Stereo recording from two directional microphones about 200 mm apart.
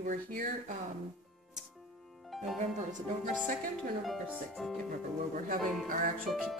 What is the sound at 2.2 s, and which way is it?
Music, centre (ahead or behind).